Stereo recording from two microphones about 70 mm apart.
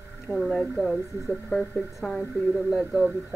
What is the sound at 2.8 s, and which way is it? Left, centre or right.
Speech, centre.